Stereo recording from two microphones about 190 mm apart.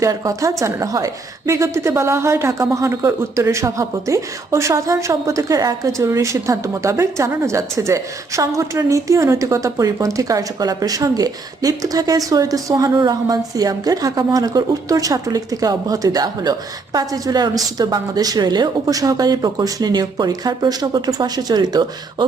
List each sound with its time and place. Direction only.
0.0 s a woman's voice: 15° right (ahead or behind)